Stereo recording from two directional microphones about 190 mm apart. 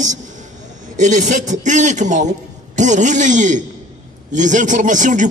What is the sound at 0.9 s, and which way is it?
A man's voice, 40° right (ahead or behind).